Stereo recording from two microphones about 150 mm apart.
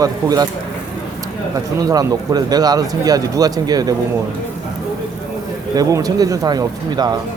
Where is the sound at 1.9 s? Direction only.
25° right (ahead or behind).